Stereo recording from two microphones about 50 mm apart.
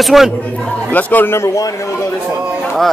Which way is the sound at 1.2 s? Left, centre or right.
Left.